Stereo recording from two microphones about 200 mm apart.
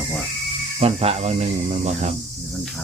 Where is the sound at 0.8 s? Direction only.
30° right (ahead or behind).